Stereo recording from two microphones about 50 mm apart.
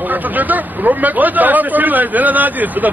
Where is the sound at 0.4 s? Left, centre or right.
Right.